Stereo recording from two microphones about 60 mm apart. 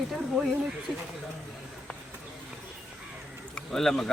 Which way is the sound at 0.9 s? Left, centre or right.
Centre.